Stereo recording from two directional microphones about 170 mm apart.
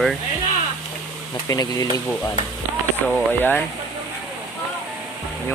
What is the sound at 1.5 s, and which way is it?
Speech, 20° left (ahead or behind).